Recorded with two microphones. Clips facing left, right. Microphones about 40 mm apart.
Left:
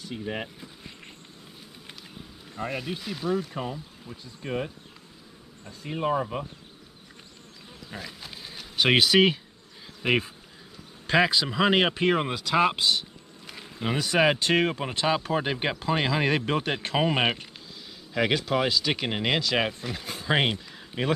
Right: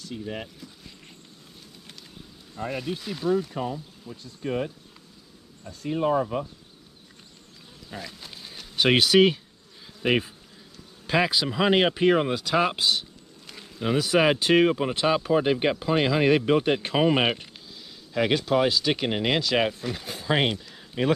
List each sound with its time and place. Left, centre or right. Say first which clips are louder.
0.0 s speech: left 1 dB; centre
2.7 s speech: right 4 dB; centre
7.9 s speech: right 1 dB; centre
13.5 s bee: right 3 dB; centre
14.0 s speech: right 1 dB; centre